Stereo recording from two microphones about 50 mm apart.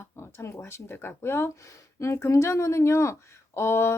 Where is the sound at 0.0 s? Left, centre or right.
Left.